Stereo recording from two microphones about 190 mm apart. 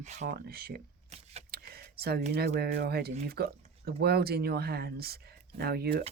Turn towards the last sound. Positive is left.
turn(degrees=-55)  # may be behind; listen again after turning